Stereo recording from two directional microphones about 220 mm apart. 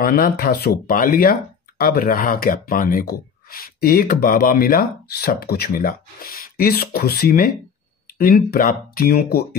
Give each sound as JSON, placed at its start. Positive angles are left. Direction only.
{"t": 0.0, "sound": "speech", "side_deg": 40}